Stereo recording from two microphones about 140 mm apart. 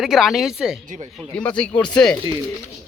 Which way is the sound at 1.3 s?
10° left (ahead or behind).